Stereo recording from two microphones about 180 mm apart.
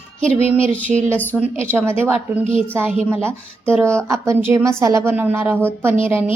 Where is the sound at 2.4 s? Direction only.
30° left (ahead or behind).